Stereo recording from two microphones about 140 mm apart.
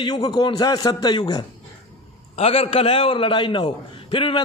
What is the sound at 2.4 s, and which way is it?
A man's voice, 45° left (ahead or behind).